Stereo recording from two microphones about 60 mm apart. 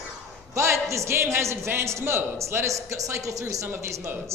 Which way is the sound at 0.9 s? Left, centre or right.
Right.